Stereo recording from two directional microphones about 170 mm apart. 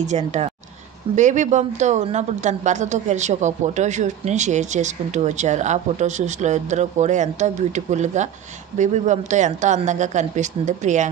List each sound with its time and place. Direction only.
0.0 s speech: 40° right (ahead or behind)